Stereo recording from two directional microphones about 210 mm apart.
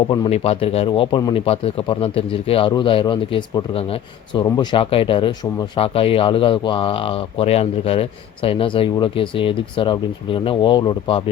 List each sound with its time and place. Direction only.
0.1 s speech: 30° left (ahead or behind)